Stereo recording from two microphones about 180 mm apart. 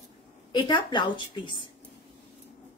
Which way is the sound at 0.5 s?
25° left (ahead or behind).